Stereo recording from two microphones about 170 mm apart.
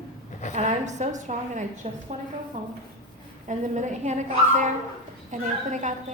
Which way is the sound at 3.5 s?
45° right (ahead or behind).